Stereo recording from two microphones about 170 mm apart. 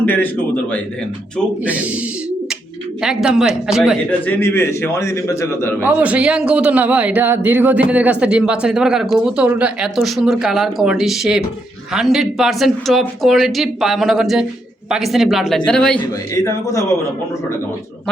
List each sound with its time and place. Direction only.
0.0 s a man's voice: 10° left (ahead or behind)
1.6 s speech: 10° right (ahead or behind)
3.0 s a man's voice: 5° right (ahead or behind)
4.3 s a man's voice: 15° left (ahead or behind)
5.8 s a man's voice: 10° right (ahead or behind)
16.3 s a man's voice: 20° left (ahead or behind)